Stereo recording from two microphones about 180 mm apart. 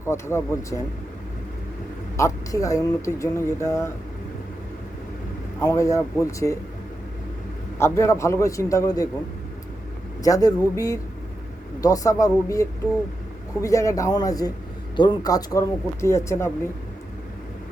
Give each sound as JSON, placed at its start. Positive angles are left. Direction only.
{"t": 0.0, "sound": "speech", "side_deg": 15}
{"t": 2.1, "sound": "speech", "side_deg": 15}
{"t": 5.5, "sound": "speech", "side_deg": 15}
{"t": 7.8, "sound": "speech", "side_deg": 15}
{"t": 10.2, "sound": "speech", "side_deg": 20}